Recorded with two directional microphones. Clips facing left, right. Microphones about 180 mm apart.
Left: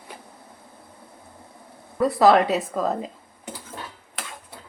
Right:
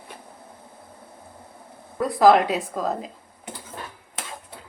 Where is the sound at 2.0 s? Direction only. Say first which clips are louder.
Even; centre (ahead or behind).